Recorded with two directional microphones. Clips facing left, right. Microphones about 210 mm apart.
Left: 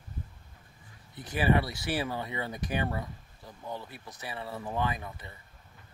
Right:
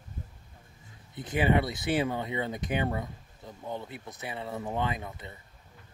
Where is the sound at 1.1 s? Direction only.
20° right (ahead or behind).